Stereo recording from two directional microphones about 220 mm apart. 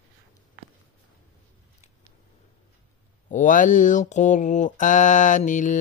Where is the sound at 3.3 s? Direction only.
35° left (ahead or behind).